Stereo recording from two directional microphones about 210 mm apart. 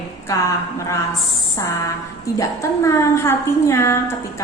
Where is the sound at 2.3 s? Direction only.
15° left (ahead or behind).